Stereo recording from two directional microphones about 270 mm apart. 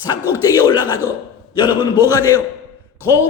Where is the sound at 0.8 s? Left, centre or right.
Centre.